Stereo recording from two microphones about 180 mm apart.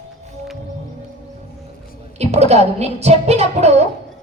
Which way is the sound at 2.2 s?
35° right (ahead or behind).